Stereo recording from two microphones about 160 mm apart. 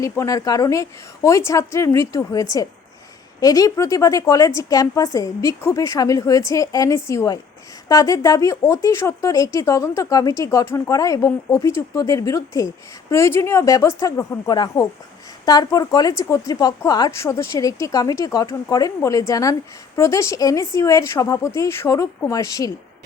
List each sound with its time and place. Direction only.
0.0 s a woman's voice: 20° left (ahead or behind)